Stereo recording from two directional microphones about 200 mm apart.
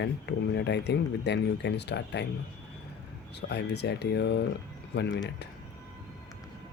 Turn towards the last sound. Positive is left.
turn(degrees=60)  # may be behind; listen again after turning